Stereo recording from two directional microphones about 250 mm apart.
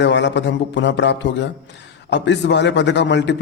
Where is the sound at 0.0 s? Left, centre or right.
Left.